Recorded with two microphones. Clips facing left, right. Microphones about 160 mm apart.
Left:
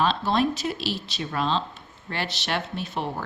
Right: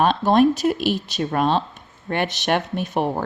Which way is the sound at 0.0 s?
50° right (ahead or behind).